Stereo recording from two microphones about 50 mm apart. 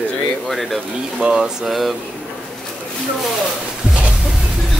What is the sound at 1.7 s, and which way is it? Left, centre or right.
Speech, centre.